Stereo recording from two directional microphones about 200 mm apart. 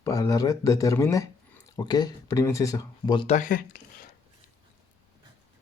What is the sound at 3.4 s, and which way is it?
Speech, 45° left (ahead or behind).